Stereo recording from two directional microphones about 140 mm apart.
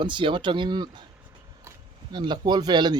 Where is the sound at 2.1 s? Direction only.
30° right (ahead or behind).